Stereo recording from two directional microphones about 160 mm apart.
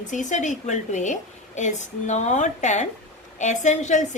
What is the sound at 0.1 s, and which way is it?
A woman's voice, 50° left (ahead or behind).